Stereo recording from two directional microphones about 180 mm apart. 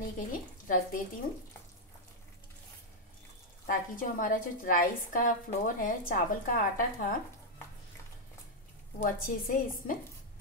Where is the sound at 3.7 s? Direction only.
50° left (ahead or behind).